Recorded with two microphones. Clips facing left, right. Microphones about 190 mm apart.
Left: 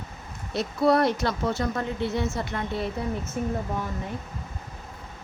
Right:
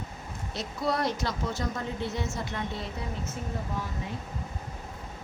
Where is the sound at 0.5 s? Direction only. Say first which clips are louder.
Left 9 dB; 60° left (ahead or behind).